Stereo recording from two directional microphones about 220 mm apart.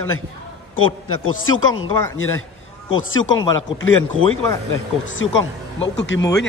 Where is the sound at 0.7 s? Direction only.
65° left (ahead or behind).